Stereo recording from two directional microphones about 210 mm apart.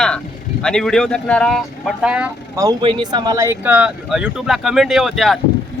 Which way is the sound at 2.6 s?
20° right (ahead or behind).